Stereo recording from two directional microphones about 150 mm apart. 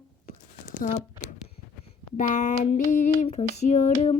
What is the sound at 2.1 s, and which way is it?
Child singing, 55° left (ahead or behind).